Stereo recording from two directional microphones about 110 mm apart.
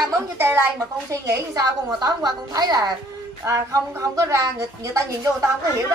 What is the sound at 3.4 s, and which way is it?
A woman's voice, 25° right (ahead or behind).